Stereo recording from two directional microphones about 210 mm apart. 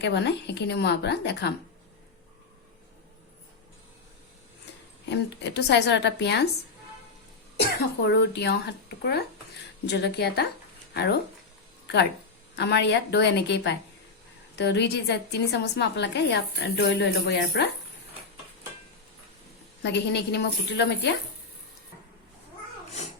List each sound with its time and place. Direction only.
0.0 s a woman's voice: 55° left (ahead or behind)
5.0 s a woman's voice: 55° left (ahead or behind)
8.0 s a woman's voice: 55° left (ahead or behind)
12.5 s a woman's voice: 55° left (ahead or behind)
19.8 s a woman's voice: 55° left (ahead or behind)